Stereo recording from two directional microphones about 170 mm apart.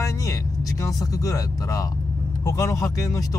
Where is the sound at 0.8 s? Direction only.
20° left (ahead or behind).